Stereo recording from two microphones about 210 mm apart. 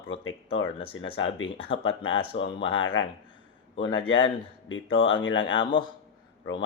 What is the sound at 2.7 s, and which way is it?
Speech, 70° left (ahead or behind).